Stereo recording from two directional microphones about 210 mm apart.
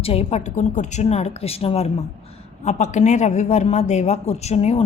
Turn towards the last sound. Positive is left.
turn(degrees=30)  # may be behind; listen again after turning